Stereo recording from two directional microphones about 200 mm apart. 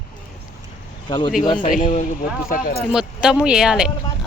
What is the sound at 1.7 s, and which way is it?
Speech, 40° left (ahead or behind).